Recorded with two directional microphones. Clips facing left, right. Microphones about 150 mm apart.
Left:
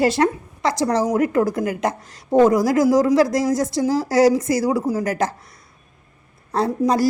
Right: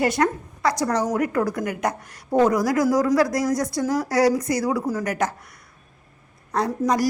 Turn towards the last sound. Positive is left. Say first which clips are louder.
# left 3 dB
turn(degrees=30)  # may be behind; listen again after turning